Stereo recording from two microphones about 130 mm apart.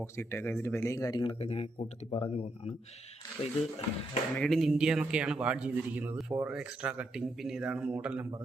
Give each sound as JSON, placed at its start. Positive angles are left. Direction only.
{"t": 0.0, "sound": "speech", "side_deg": 20}
{"t": 1.2, "sound": "speech", "side_deg": 45}
{"t": 3.4, "sound": "speech", "side_deg": 55}
{"t": 4.4, "sound": "speech", "side_deg": 0}